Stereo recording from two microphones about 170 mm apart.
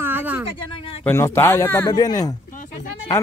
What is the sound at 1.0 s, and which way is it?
Speech, 15° left (ahead or behind).